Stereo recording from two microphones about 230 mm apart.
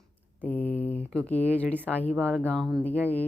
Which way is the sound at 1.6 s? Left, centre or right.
Centre.